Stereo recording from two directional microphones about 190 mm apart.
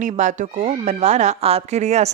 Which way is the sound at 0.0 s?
40° right (ahead or behind).